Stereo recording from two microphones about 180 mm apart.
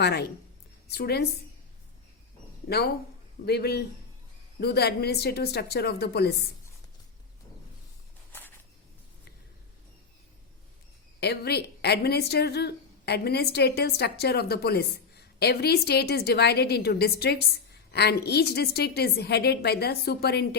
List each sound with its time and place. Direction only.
0.0 s speech: 65° left (ahead or behind)
2.6 s speech: 60° left (ahead or behind)
8.3 s a sound: 10° left (ahead or behind)
11.2 s speech: 65° left (ahead or behind)